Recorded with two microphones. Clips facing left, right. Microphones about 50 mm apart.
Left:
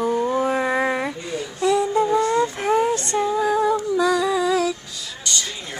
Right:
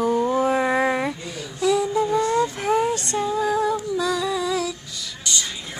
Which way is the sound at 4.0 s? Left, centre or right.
Left.